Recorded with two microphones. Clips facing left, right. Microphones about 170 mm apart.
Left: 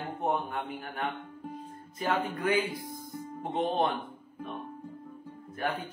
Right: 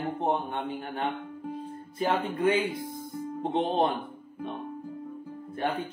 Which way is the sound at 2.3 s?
25° right (ahead or behind).